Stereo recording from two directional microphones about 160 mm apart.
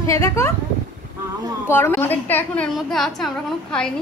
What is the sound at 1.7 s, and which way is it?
A woman's voice, 15° left (ahead or behind).